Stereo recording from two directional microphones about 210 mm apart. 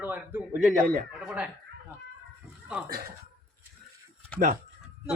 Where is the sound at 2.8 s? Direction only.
50° right (ahead or behind).